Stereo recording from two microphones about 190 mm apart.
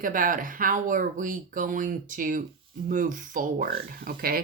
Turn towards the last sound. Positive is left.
turn(degrees=-50)  # may be behind; listen again after turning